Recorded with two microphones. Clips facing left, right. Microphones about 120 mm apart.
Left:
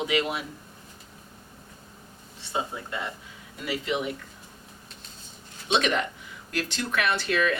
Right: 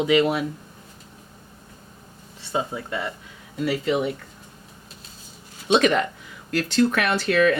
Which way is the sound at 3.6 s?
40° right (ahead or behind).